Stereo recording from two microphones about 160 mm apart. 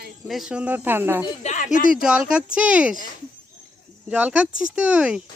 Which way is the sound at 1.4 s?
50° left (ahead or behind).